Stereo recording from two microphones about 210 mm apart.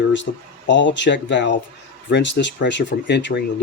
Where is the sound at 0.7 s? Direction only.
60° left (ahead or behind).